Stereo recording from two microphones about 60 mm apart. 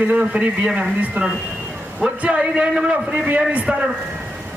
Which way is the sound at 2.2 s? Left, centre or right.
Centre.